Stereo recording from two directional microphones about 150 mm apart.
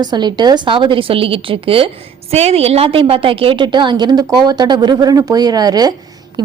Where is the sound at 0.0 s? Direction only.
30° right (ahead or behind).